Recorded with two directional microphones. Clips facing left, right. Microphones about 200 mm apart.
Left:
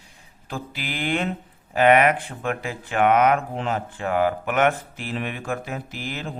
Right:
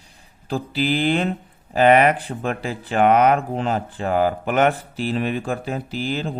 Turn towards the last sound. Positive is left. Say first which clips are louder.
# right 7 dB
turn(degrees=-30)  # may be behind; listen again after turning